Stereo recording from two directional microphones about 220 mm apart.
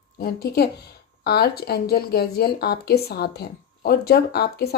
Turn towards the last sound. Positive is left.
turn(degrees=45)  # may be behind; listen again after turning